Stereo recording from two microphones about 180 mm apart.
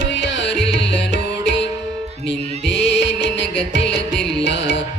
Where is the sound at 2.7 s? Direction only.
80° left.